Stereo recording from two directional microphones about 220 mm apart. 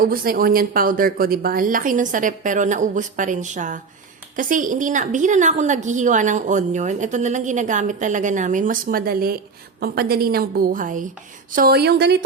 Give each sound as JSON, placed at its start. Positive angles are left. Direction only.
{"t": 0.0, "sound": "a woman's voice", "side_deg": -40}